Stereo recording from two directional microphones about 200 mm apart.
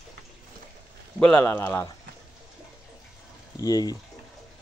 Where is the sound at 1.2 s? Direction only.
10° left (ahead or behind).